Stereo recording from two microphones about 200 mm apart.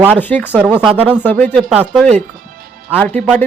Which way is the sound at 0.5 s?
5° right (ahead or behind).